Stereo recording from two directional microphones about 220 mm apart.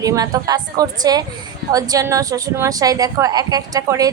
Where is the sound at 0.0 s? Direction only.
15° right (ahead or behind).